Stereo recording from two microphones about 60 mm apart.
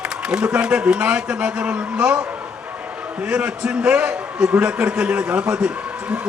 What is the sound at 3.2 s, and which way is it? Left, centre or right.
Speech, centre.